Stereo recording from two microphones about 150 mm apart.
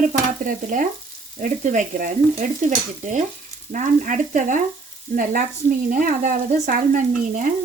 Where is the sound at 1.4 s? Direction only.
60° right (ahead or behind).